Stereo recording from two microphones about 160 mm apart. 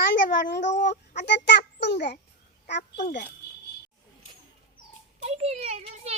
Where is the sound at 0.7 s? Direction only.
90° left.